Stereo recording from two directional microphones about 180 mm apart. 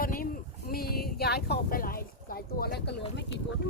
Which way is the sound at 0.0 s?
50° left (ahead or behind).